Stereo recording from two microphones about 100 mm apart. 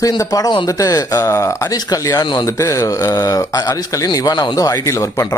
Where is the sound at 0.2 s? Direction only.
35° left (ahead or behind).